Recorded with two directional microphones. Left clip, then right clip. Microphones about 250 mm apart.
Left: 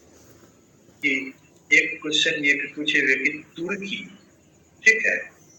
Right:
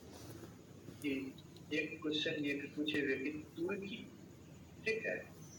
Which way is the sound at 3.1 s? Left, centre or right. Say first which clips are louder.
Left 18 dB; left.